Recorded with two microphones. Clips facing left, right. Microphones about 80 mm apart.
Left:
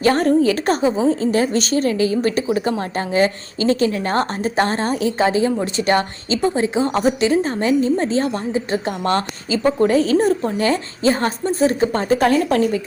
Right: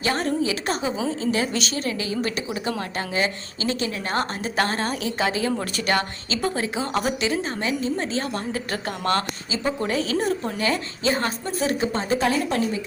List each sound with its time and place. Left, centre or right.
0.0 s a woman's voice: left
8.5 s a woman's voice: left
9.5 s a woman's voice: left
11.9 s a woman's voice: left